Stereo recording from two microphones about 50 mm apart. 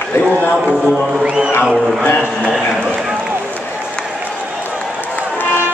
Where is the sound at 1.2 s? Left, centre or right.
Right.